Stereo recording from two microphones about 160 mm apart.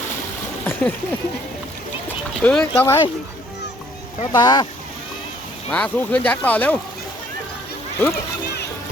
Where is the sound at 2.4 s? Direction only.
5° left (ahead or behind).